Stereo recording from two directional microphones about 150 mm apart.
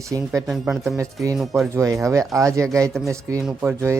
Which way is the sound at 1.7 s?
20° right (ahead or behind).